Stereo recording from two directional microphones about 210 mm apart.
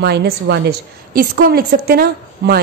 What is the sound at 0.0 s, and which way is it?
A woman's voice, 50° right (ahead or behind).